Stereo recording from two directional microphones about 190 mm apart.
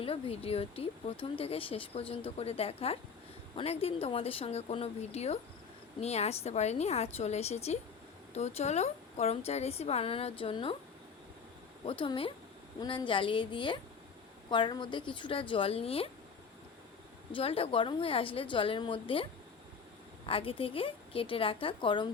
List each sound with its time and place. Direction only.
0.0 s speech: 30° left (ahead or behind)
11.9 s a woman's voice: 25° left (ahead or behind)
17.3 s a woman's voice: 30° left (ahead or behind)